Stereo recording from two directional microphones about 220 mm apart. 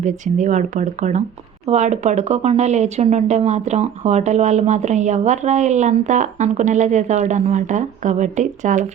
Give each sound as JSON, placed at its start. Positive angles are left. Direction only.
{"t": 0.0, "sound": "speech", "side_deg": -35}